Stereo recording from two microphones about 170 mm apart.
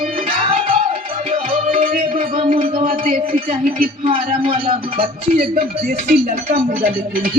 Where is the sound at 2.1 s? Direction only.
40° right (ahead or behind).